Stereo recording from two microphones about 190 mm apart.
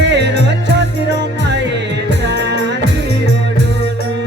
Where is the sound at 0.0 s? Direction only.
65° right (ahead or behind).